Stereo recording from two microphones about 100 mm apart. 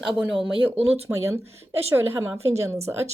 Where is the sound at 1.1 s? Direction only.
30° right (ahead or behind).